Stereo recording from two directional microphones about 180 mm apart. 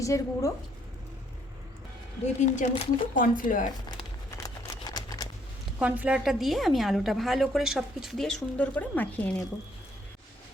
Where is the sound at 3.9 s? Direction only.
20° left (ahead or behind).